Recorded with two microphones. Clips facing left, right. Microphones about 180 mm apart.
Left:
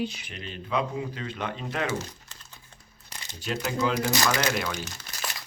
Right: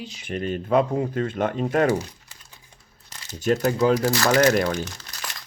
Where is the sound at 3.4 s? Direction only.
45° right (ahead or behind).